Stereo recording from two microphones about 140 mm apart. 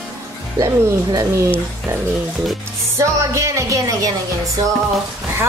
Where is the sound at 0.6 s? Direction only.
20° right (ahead or behind).